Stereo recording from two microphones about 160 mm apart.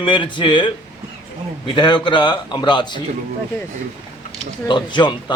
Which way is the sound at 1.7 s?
30° left (ahead or behind).